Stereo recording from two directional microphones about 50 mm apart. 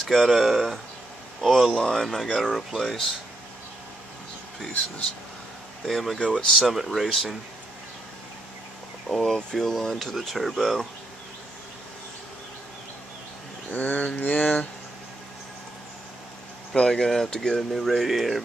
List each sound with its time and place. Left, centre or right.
0.0 s speech: centre
0.3 s speech: centre
1.7 s speech: centre
2.4 s speech: centre
2.8 s speech: centre
5.9 s speech: centre
6.2 s speech: centre
6.7 s speech: centre
9.1 s speech: centre
13.7 s a sound: left
16.7 s speech: centre